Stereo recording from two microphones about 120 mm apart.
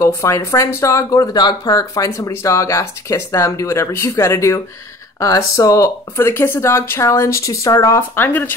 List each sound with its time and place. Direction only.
0.0 s speech: 25° left (ahead or behind)